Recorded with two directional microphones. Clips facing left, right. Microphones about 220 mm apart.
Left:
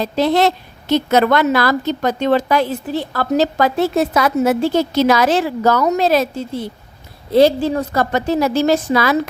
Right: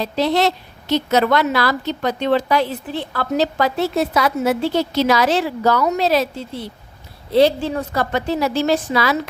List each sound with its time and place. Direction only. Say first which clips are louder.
0.0 s a woman's voice: left 3 dB; 50° left (ahead or behind)